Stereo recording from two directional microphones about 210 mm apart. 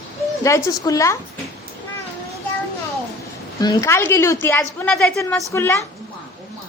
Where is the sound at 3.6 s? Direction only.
15° left (ahead or behind).